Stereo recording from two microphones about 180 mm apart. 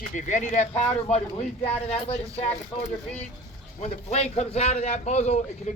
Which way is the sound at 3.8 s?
35° left (ahead or behind).